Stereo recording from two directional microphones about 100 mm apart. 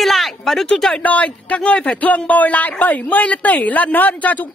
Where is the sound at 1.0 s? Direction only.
15° left (ahead or behind).